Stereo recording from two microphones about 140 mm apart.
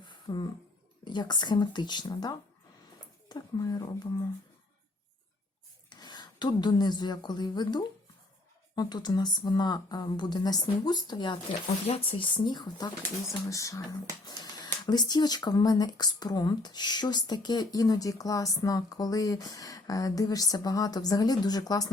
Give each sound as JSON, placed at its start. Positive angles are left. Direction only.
{"t": 0.0, "sound": "a sound", "side_deg": 30}
{"t": 1.0, "sound": "speech", "side_deg": 30}
{"t": 5.9, "sound": "speech", "side_deg": 30}